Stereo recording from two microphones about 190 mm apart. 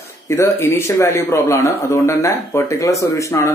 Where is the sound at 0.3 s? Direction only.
15° left (ahead or behind).